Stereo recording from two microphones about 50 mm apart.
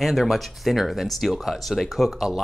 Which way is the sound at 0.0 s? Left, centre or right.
Centre.